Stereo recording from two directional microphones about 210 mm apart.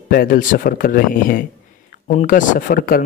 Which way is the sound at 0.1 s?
45° left (ahead or behind).